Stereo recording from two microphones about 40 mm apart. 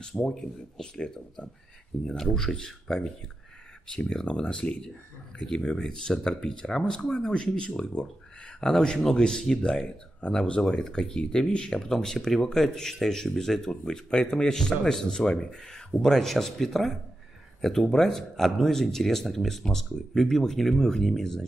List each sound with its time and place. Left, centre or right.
0.3 s speech: centre
4.3 s speech: left
5.6 s speech: centre